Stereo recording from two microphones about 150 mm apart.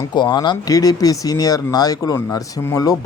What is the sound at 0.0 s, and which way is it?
Speech, 30° left (ahead or behind).